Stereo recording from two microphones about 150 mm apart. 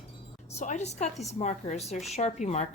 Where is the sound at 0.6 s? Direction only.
50° left (ahead or behind).